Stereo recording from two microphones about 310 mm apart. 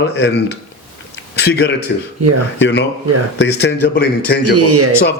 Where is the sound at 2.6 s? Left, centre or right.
Left.